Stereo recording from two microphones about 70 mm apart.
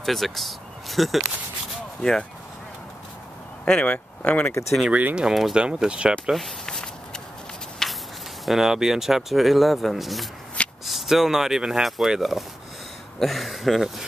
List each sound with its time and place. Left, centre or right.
0.0 s speech: centre
3.6 s speech: centre
4.5 s speech: left
4.8 s speech: centre
5.2 s speech: centre
6.6 s walk: centre
7.8 s a sound: centre
8.5 s speech: centre